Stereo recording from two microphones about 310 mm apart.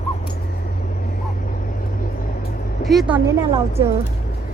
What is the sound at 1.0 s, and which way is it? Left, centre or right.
Vehicle, left.